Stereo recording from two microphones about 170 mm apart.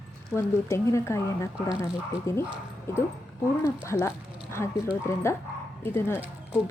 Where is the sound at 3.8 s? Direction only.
15° left (ahead or behind).